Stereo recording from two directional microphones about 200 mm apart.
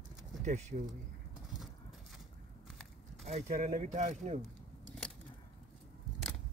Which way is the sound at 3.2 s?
35° right (ahead or behind).